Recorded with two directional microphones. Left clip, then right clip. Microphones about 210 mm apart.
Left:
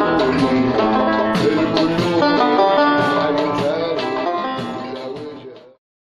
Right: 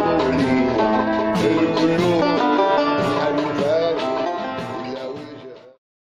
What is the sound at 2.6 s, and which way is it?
Music, 15° left (ahead or behind).